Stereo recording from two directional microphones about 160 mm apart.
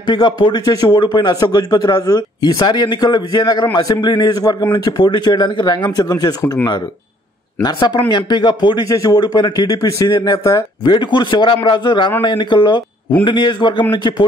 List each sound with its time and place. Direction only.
0.0 s a man's voice: 25° left (ahead or behind)
8.1 s a man's voice: 25° left (ahead or behind)